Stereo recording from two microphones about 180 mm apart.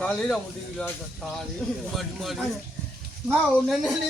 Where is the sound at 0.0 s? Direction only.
5° left (ahead or behind).